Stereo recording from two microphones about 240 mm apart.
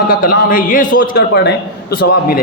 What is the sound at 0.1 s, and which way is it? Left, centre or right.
A man's voice, left.